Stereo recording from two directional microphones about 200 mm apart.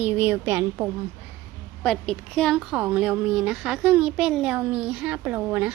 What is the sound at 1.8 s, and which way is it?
A woman's voice, 5° left (ahead or behind).